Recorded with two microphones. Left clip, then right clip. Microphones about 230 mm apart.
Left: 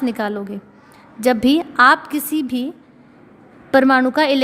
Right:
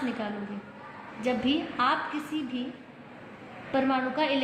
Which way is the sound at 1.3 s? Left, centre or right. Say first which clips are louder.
Left 11 dB; left.